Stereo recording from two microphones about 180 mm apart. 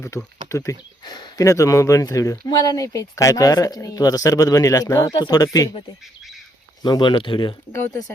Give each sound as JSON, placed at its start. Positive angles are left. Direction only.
{"t": 0.4, "sound": "speech", "side_deg": 15}
{"t": 6.8, "sound": "speech", "side_deg": 25}